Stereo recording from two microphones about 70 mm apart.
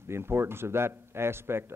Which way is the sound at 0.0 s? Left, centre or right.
Right.